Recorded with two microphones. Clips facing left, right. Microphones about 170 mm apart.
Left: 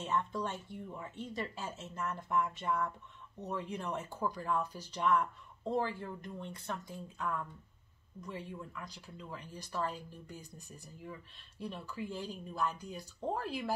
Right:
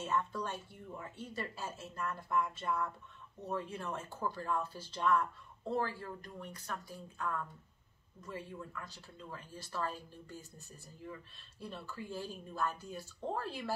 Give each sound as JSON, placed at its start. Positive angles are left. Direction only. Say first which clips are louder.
{"t": 0.0, "sound": "speech", "louder": "left 1 dB", "side_deg": 20}
{"t": 11.6, "sound": "speech", "louder": "left 4 dB", "side_deg": 15}